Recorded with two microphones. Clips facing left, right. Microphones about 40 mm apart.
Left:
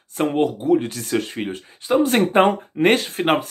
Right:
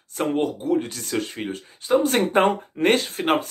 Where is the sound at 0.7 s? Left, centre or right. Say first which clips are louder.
Left 4 dB; left.